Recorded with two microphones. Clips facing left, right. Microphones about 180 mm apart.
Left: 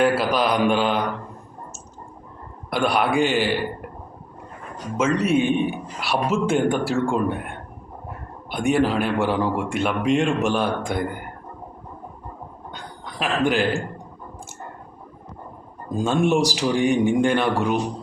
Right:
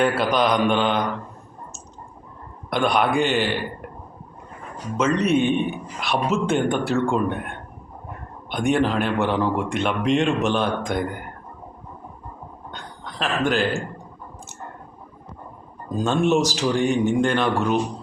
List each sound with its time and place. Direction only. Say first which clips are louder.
0.0 s speech: even; 5° left (ahead or behind)
2.6 s a man's voice: right 1 dB; 5° left (ahead or behind)
4.9 s a man's voice: even; 5° left (ahead or behind)
12.7 s a sound: even; 10° left (ahead or behind)
15.9 s a man's voice: even; 10° left (ahead or behind)